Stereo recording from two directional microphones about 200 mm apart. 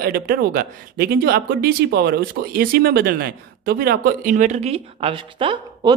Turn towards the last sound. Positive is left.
turn(degrees=-25)  # may be behind; listen again after turning